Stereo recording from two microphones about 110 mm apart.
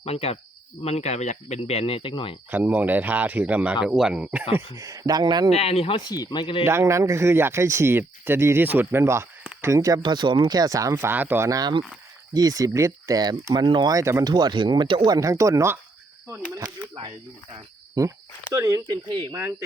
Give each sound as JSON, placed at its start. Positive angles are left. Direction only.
{"t": 0.0, "sound": "speech", "side_deg": 70}
{"t": 2.5, "sound": "speech", "side_deg": -15}
{"t": 4.7, "sound": "speech", "side_deg": -30}
{"t": 5.5, "sound": "speech", "side_deg": 65}
{"t": 6.1, "sound": "speech", "side_deg": 35}
{"t": 6.7, "sound": "speech", "side_deg": -25}
{"t": 10.0, "sound": "speech", "side_deg": -45}
{"t": 11.4, "sound": "speech", "side_deg": -35}
{"t": 13.9, "sound": "speech", "side_deg": -25}
{"t": 14.3, "sound": "speech", "side_deg": -40}
{"t": 18.0, "sound": "speech", "side_deg": -35}